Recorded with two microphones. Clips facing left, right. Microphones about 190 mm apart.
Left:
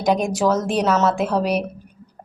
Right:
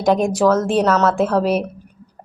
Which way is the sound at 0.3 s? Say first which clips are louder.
Right 4 dB; 20° left (ahead or behind).